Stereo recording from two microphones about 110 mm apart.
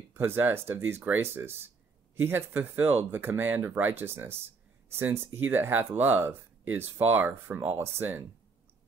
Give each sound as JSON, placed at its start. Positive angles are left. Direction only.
{"t": 0.1, "sound": "speech", "side_deg": -20}